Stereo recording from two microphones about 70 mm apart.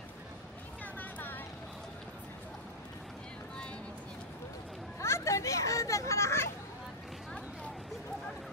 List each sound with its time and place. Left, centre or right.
0.9 s vehicle: left
5.0 s children playing: left